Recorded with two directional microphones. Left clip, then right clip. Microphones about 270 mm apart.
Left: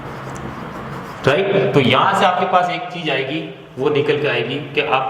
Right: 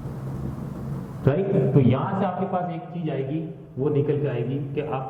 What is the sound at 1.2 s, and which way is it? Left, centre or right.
Speech, centre.